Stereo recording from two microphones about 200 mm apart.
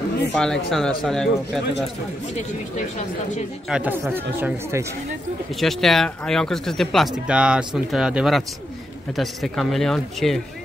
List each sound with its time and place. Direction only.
0.3 s speech: centre (ahead or behind)
3.6 s speech: 5° right (ahead or behind)
5.6 s speech: centre (ahead or behind)